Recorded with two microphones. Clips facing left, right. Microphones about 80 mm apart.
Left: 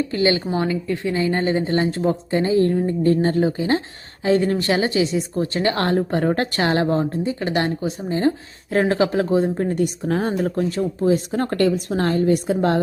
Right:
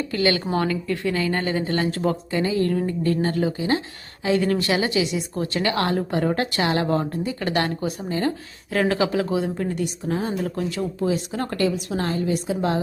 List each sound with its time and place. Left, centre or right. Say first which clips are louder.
0.1 s a woman's voice: left 2 dB; left
6.8 s a woman's voice: left 3 dB; left
10.5 s speech: left 4 dB; left